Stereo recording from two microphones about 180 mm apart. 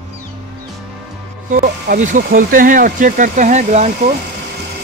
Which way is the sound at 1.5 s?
45° right (ahead or behind).